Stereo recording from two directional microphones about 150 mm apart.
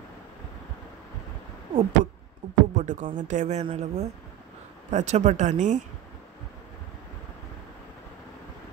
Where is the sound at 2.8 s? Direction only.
55° right (ahead or behind).